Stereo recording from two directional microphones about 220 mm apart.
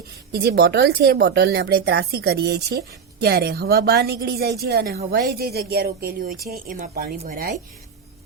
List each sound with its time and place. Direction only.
0.3 s speech: 45° right (ahead or behind)